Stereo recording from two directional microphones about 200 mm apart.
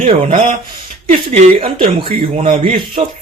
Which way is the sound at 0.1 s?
30° right (ahead or behind).